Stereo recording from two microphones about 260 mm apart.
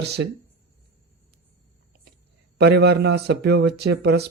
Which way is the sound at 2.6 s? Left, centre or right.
Right.